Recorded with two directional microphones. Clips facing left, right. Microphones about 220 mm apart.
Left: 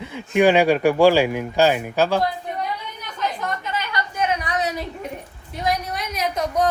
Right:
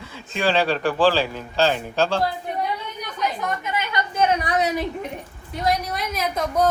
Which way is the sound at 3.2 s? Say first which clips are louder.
Even; 20° right (ahead or behind).